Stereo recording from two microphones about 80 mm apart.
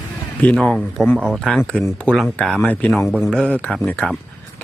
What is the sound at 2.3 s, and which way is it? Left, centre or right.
A man's voice, centre.